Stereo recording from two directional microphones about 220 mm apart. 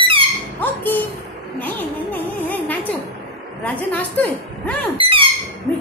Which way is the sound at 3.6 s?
5° left (ahead or behind).